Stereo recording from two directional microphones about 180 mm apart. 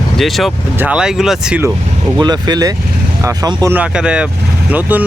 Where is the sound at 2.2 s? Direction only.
25° right (ahead or behind).